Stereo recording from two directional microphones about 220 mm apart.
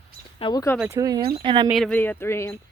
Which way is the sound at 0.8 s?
15° right (ahead or behind).